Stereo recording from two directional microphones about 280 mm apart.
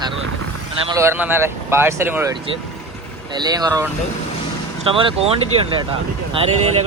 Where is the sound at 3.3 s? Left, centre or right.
Centre.